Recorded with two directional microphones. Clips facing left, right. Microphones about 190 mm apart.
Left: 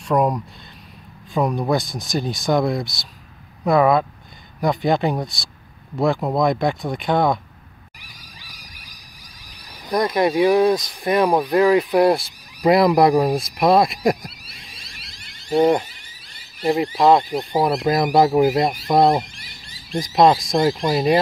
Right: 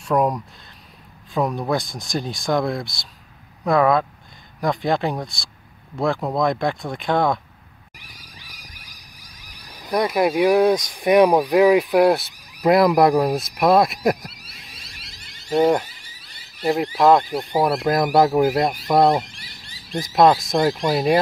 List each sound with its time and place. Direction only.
0.1 s speech: centre (ahead or behind)
9.8 s speech: 5° right (ahead or behind)
11.0 s speech: 15° right (ahead or behind)
15.4 s speech: 5° right (ahead or behind)